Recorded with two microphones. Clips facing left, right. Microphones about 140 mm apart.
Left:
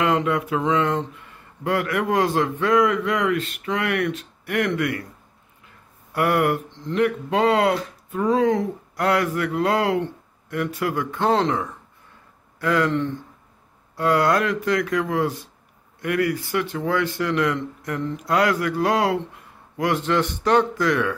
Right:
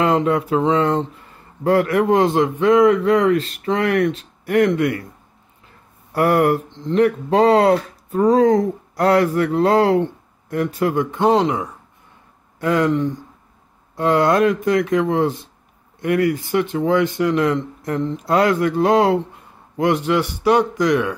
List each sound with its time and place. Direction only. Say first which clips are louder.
0.0 s speech: right 4 dB; 30° right (ahead or behind)
6.1 s speech: right 4 dB; 35° right (ahead or behind); by 13.2 s 10° right (ahead or behind)
13.9 s speech: right 4 dB; 25° right (ahead or behind)